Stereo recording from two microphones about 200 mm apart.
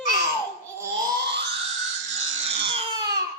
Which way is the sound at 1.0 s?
55° right (ahead or behind).